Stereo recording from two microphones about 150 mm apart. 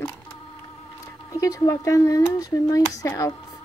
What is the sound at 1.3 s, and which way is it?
Speech, 20° left (ahead or behind).